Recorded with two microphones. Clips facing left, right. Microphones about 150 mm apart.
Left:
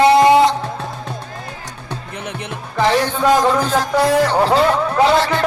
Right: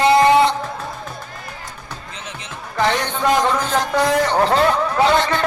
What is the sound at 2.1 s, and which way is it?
Music, 60° left (ahead or behind).